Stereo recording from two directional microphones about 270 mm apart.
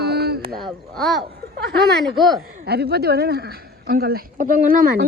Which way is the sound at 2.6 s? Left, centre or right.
Right.